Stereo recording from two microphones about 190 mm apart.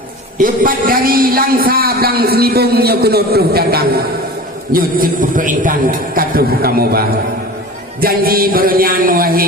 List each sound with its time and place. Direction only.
0.3 s a man's voice: 45° right (ahead or behind)
8.0 s a man's voice: 50° right (ahead or behind)